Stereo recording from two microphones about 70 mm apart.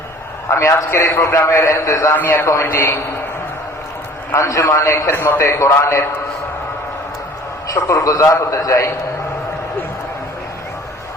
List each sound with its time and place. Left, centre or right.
0.5 s a man's voice: left
2.1 s a man's voice: left
4.4 s a man's voice: left
5.1 s a man's voice: left
5.4 s a man's voice: left
7.7 s a man's voice: left